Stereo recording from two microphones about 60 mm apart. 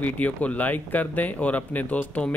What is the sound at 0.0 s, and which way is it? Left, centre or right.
Speech, left.